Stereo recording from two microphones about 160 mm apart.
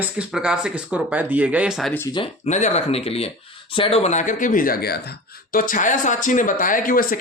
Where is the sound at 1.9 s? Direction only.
15° left (ahead or behind).